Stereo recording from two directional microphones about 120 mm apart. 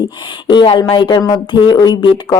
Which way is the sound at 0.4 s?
45° left (ahead or behind).